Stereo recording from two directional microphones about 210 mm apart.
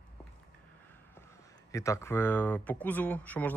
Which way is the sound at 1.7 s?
15° left (ahead or behind).